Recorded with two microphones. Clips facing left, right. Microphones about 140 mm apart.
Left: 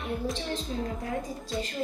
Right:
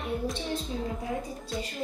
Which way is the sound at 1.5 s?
Centre (ahead or behind).